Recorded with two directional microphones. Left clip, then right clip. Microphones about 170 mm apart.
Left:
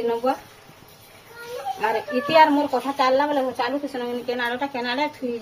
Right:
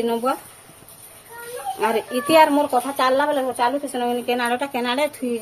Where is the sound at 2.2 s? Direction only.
60° right (ahead or behind).